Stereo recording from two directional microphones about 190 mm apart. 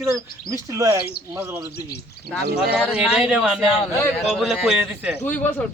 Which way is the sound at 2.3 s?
55° right (ahead or behind).